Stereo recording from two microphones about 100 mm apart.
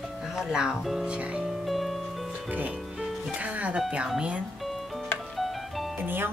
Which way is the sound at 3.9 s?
10° right (ahead or behind).